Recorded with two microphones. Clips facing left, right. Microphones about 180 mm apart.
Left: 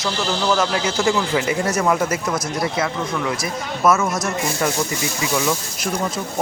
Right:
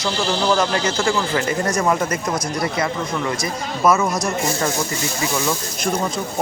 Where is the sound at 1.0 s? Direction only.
15° left (ahead or behind).